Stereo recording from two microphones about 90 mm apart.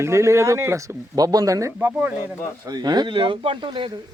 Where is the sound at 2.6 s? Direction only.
50° right (ahead or behind).